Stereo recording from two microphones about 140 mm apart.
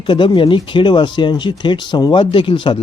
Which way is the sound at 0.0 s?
35° left (ahead or behind).